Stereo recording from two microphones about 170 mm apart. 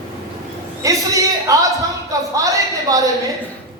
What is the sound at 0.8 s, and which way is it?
A man's voice, 20° right (ahead or behind).